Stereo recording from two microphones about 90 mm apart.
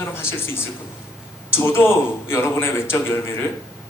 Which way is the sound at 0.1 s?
25° left (ahead or behind).